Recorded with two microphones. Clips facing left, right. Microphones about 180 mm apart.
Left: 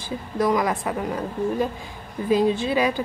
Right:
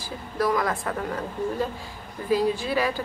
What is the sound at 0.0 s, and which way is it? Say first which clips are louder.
A woman's voice: left 3 dB; 20° left (ahead or behind).